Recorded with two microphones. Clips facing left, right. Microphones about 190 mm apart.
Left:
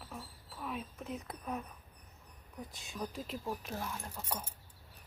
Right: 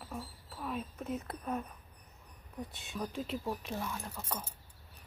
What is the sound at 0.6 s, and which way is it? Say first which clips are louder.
Speech: right 3 dB; centre (ahead or behind).